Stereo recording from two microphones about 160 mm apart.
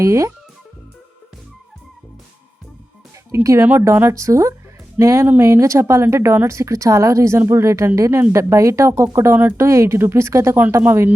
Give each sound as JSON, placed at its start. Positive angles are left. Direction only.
{"t": 0.0, "sound": "speech", "side_deg": -20}
{"t": 3.3, "sound": "speech", "side_deg": -15}